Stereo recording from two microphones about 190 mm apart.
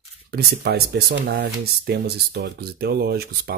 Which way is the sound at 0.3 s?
55° right (ahead or behind).